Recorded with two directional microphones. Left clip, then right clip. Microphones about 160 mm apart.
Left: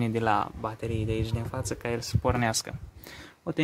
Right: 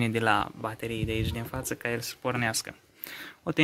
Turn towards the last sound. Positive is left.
turn(degrees=-15)  # may be behind; listen again after turning